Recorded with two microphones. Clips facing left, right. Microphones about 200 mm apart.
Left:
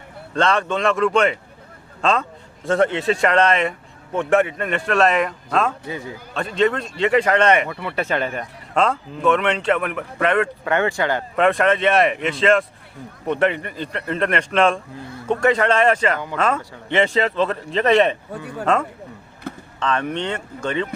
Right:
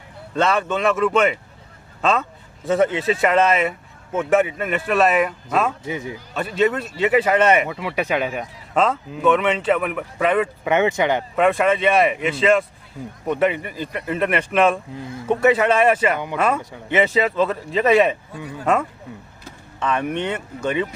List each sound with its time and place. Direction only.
0.3 s a man's voice: 5° right (ahead or behind)
5.8 s speech: 20° right (ahead or behind)
6.3 s speech: 5° right (ahead or behind)
10.7 s speech: 20° right (ahead or behind)
11.3 s a man's voice: centre (ahead or behind)
19.5 s vehicle: 60° left (ahead or behind)
19.8 s a man's voice: 10° right (ahead or behind)